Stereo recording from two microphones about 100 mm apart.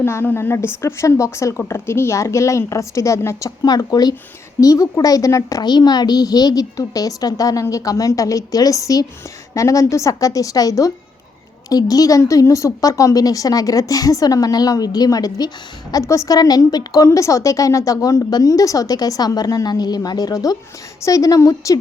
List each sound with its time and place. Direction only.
0.0 s a woman's voice: 25° left (ahead or behind)